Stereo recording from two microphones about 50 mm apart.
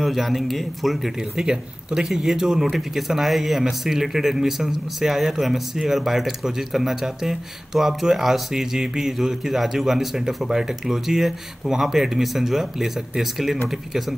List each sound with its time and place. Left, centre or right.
0.0 s speech: centre
1.4 s speech: centre